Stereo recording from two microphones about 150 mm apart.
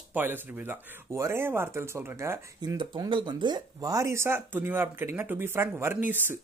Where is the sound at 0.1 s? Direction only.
15° right (ahead or behind).